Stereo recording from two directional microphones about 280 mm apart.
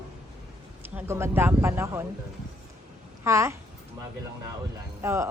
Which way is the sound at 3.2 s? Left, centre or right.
Centre.